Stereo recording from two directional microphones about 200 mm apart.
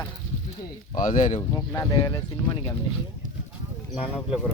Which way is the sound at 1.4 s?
15° left (ahead or behind).